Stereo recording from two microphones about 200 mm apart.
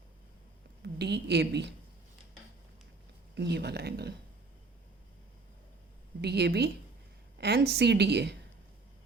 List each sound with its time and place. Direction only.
0.8 s a woman's voice: 60° right (ahead or behind)
3.3 s speech: 55° right (ahead or behind)
6.2 s a woman's voice: 55° right (ahead or behind)